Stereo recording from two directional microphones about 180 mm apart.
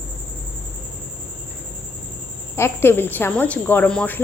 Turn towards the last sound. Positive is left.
turn(degrees=5)  # may be behind; listen again after turning